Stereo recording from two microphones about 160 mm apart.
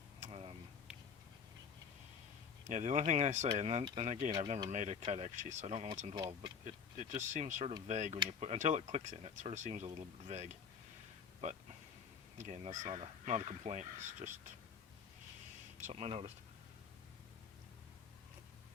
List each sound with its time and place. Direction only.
0.2 s a sound: 40° right (ahead or behind)
2.6 s speech: 50° right (ahead or behind)
12.4 s speech: 45° right (ahead or behind)
15.8 s speech: 40° right (ahead or behind)